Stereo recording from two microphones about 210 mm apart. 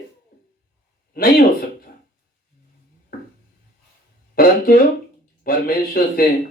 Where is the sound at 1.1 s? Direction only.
45° left (ahead or behind).